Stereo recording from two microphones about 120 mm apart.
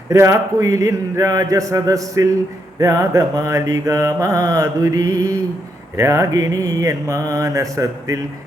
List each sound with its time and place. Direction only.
0.1 s mantra: 25° right (ahead or behind)